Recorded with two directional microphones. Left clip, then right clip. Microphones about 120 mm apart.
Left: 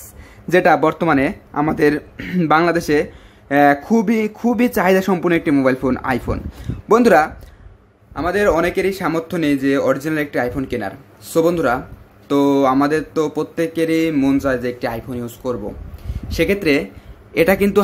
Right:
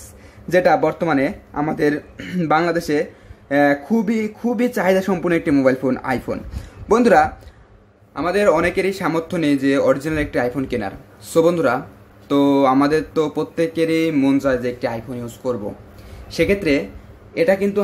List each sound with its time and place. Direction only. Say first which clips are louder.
0.5 s a man's voice: left 2 dB; 25° left (ahead or behind)
17.3 s a man's voice: left 2 dB; 65° left (ahead or behind)